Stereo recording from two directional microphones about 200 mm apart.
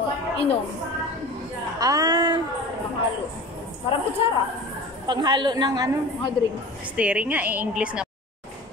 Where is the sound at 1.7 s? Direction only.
20° right (ahead or behind).